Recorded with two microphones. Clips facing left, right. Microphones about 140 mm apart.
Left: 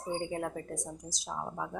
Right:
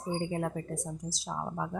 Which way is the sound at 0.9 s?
20° left (ahead or behind).